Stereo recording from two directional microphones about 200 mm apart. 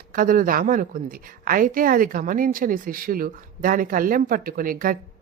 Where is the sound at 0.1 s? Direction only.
45° right (ahead or behind).